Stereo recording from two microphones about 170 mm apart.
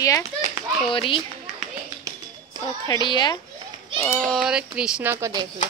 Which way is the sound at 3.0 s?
25° left (ahead or behind).